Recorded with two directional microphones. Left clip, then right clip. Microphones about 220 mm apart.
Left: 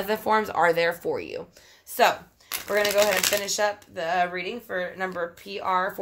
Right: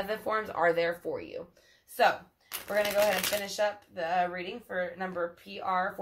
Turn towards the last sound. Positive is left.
turn(degrees=45)  # may be behind; listen again after turning